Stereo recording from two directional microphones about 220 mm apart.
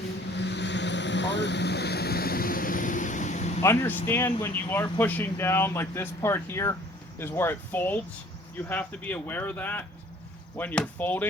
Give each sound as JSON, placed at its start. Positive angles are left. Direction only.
{"t": 0.3, "sound": "vehicle", "side_deg": 50}
{"t": 3.6, "sound": "speech", "side_deg": 10}